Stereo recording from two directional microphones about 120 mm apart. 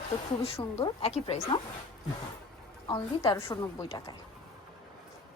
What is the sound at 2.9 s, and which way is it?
Speech, 35° left (ahead or behind).